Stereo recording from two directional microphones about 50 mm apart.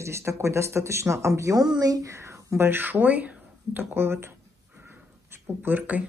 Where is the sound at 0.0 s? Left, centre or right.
Right.